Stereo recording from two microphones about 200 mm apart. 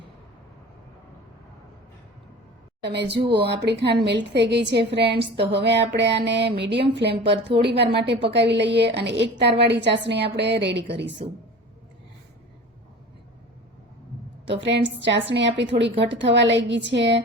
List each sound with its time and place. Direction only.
2.8 s a woman's voice: 60° right (ahead or behind)
14.4 s a woman's voice: 60° right (ahead or behind)